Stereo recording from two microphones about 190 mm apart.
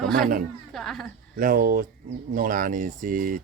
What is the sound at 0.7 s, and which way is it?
Speech, centre (ahead or behind).